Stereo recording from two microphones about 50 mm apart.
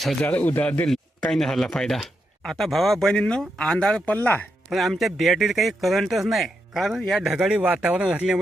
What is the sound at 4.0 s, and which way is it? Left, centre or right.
Speech, left.